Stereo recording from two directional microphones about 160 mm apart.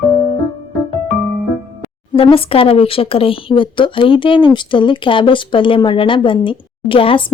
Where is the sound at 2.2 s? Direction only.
35° left (ahead or behind).